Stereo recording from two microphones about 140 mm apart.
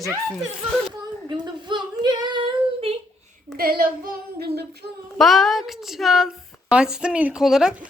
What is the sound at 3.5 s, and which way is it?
Child singing, 90° right.